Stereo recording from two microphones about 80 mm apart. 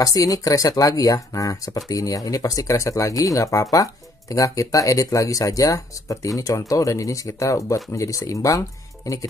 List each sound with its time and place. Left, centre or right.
0.0 s speech: left